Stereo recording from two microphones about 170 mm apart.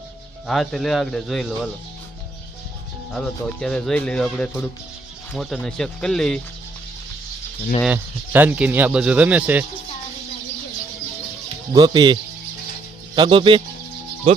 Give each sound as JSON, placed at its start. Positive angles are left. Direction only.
{"t": 0.4, "sound": "speech", "side_deg": 0}
{"t": 3.1, "sound": "speech", "side_deg": 5}
{"t": 7.9, "sound": "speech", "side_deg": -10}
{"t": 11.7, "sound": "speech", "side_deg": -25}